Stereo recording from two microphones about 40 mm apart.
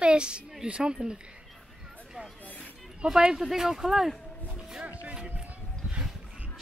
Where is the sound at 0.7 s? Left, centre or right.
Right.